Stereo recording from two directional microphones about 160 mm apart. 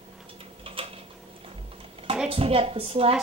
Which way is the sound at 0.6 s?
35° right (ahead or behind).